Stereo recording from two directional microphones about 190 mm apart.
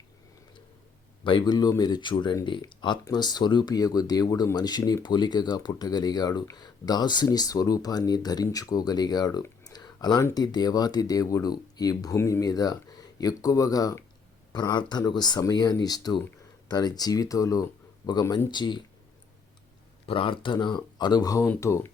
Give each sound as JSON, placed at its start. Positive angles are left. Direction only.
{"t": 1.2, "sound": "speech", "side_deg": 25}
{"t": 20.1, "sound": "speech", "side_deg": 25}